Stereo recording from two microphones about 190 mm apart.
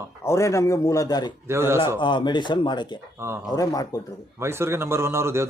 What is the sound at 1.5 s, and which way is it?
Speech, 15° right (ahead or behind).